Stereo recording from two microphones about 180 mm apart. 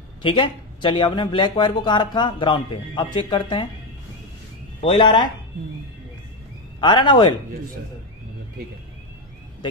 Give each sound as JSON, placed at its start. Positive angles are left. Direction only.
{"t": 0.2, "sound": "speech", "side_deg": 30}
{"t": 4.8, "sound": "speech", "side_deg": 25}
{"t": 6.8, "sound": "speech", "side_deg": 25}